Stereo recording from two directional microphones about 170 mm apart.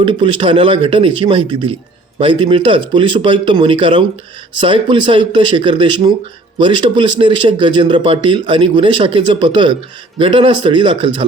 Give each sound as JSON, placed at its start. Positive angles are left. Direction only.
{"t": 0.0, "sound": "speech", "side_deg": -30}